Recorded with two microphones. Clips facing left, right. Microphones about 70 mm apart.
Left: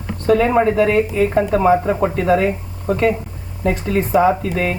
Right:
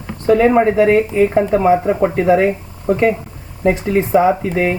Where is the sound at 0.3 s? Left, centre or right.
Centre.